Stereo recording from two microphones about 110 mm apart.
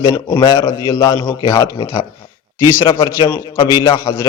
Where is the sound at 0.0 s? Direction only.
40° left (ahead or behind).